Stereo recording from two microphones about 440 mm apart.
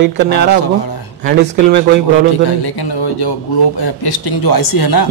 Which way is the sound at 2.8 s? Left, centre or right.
Left.